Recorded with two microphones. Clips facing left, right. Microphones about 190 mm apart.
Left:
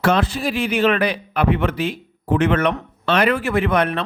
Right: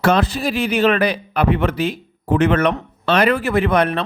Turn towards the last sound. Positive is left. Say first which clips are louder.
# right 2 dB
turn(degrees=-35)  # may be behind; listen again after turning